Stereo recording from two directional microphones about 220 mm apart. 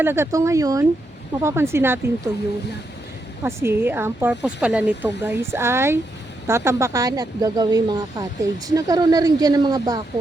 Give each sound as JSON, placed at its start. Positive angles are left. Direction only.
{"t": 0.0, "sound": "speech", "side_deg": -10}
{"t": 3.4, "sound": "speech", "side_deg": -10}